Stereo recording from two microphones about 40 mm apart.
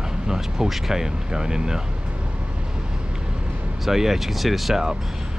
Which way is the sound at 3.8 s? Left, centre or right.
Centre.